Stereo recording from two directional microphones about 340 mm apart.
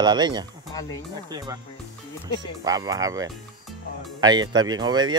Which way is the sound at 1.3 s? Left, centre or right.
Centre.